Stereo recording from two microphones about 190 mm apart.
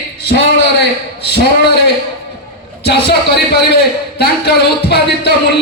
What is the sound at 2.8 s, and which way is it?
A man's voice, 60° left (ahead or behind).